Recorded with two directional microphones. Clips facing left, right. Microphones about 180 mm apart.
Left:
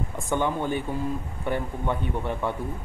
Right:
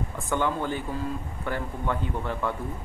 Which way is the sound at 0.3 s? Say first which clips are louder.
Left 2 dB; 15° left (ahead or behind).